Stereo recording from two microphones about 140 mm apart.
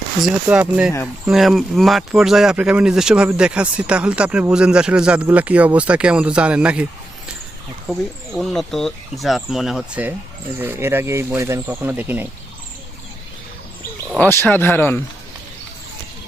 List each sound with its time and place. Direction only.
0.2 s speech: 5° right (ahead or behind)
7.9 s speech: centre (ahead or behind)
14.3 s speech: 15° left (ahead or behind)